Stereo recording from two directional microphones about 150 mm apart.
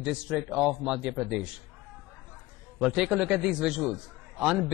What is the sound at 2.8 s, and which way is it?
Speech, 5° right (ahead or behind).